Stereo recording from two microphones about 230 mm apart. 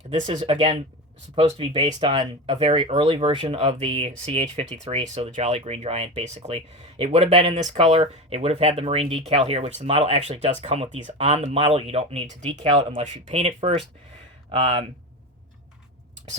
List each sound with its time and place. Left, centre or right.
0.1 s speech: right